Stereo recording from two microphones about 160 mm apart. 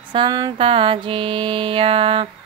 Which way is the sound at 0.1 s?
25° right (ahead or behind).